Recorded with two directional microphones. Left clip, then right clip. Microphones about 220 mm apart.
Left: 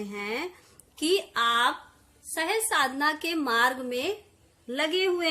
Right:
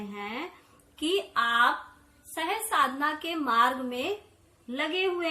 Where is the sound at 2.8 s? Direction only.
55° left (ahead or behind).